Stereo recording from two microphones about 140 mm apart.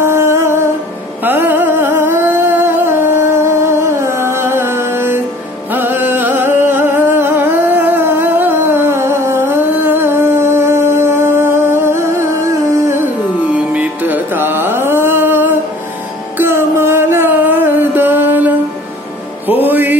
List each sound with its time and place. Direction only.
0.0 s humming: 20° right (ahead or behind)
1.2 s music: 15° right (ahead or behind)
13.5 s carnatic music: 10° right (ahead or behind)
16.3 s music: 15° right (ahead or behind)